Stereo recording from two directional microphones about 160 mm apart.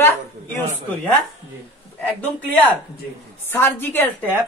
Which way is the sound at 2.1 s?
10° left (ahead or behind).